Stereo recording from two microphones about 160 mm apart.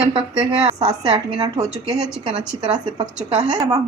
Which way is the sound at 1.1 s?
40° right (ahead or behind).